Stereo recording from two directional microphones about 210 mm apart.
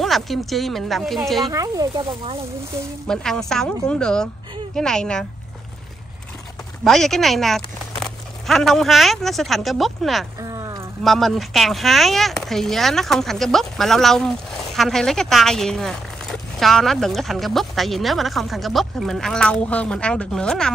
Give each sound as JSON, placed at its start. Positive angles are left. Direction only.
{"t": 0.0, "sound": "speech", "side_deg": 0}
{"t": 1.4, "sound": "speech", "side_deg": -15}
{"t": 3.1, "sound": "speech", "side_deg": 0}
{"t": 6.8, "sound": "speech", "side_deg": 0}
{"t": 10.4, "sound": "a sound", "side_deg": -15}
{"t": 11.1, "sound": "speech", "side_deg": 0}